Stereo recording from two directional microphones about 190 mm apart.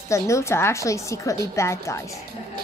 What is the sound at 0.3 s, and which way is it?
A woman's voice, 15° left (ahead or behind).